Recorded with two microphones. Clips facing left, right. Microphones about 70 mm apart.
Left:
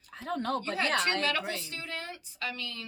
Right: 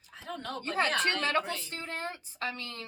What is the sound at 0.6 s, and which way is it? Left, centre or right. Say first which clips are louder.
A woman's voice: even; right.